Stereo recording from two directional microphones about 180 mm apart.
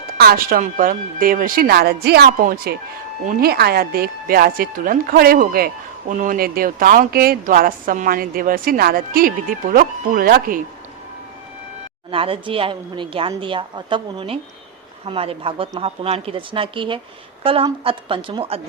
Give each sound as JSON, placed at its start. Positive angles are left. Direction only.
{"t": 0.2, "sound": "speech", "side_deg": -55}
{"t": 12.1, "sound": "a woman's voice", "side_deg": -30}